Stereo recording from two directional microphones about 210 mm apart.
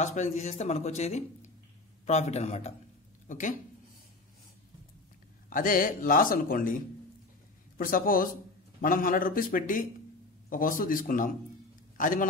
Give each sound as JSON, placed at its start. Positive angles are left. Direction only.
{"t": 0.0, "sound": "a woman's voice", "side_deg": 35}
{"t": 5.5, "sound": "a man's voice", "side_deg": 40}